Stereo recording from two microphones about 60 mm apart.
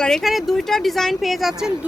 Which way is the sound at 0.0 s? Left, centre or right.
Centre.